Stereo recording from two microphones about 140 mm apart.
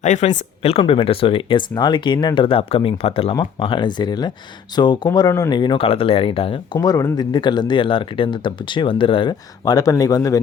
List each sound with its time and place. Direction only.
0.0 s speech: 60° left (ahead or behind); by 6.6 s 40° left (ahead or behind)
6.7 s speech: 25° left (ahead or behind)